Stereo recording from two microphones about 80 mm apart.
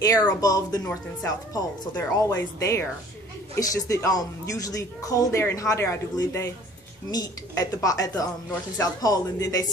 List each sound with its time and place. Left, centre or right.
0.3 s speech: left
7.1 s speech: left